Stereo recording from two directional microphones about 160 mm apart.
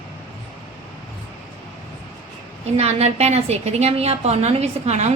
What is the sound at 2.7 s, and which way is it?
A woman's voice, 40° right (ahead or behind).